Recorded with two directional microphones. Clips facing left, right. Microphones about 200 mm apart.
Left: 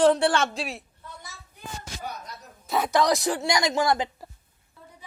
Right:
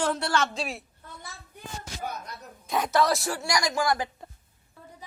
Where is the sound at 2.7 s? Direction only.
10° left (ahead or behind).